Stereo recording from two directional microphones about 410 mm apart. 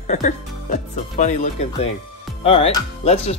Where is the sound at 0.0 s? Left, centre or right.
Centre.